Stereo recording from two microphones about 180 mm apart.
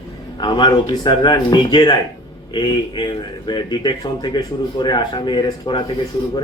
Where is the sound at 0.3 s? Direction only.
25° left (ahead or behind).